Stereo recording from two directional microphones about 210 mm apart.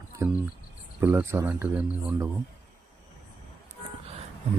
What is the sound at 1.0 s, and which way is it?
Speech, 10° right (ahead or behind).